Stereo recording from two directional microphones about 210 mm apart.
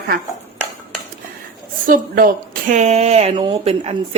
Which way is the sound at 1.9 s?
45° right (ahead or behind).